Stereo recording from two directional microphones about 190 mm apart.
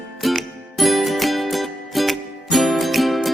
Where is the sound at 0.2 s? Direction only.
Centre (ahead or behind).